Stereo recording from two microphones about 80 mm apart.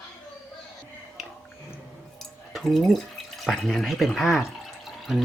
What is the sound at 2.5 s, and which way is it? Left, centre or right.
Speech, centre.